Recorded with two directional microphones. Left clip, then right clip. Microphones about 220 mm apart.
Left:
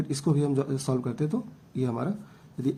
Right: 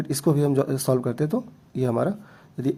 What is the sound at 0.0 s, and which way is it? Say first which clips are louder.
A man's voice: right 5 dB; 35° right (ahead or behind).